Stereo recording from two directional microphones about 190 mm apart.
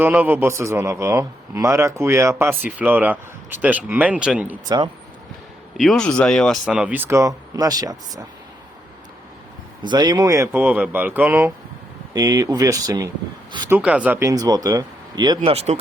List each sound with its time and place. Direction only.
0.0 s speech: 10° right (ahead or behind)
5.7 s speech: centre (ahead or behind); by 8.3 s 20° right (ahead or behind)
9.8 s speech: 20° right (ahead or behind)
13.7 s speech: 10° right (ahead or behind)
15.4 s speech: 35° right (ahead or behind)